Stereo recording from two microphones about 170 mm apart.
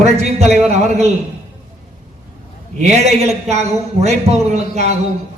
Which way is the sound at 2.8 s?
40° right (ahead or behind).